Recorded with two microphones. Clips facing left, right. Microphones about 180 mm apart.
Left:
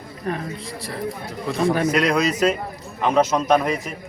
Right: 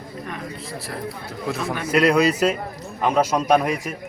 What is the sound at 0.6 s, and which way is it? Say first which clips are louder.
Speech: left 2 dB; 5° right (ahead or behind).